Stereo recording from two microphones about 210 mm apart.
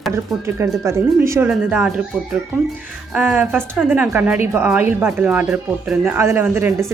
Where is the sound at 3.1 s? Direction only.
10° right (ahead or behind).